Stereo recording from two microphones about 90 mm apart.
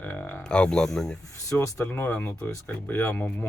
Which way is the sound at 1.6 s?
35° left (ahead or behind).